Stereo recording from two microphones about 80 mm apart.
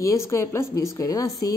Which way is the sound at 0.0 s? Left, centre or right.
Left.